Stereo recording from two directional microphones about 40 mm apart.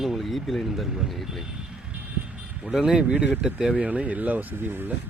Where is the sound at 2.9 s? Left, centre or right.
Right.